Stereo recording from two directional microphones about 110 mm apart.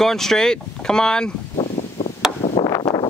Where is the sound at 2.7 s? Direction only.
40° left (ahead or behind).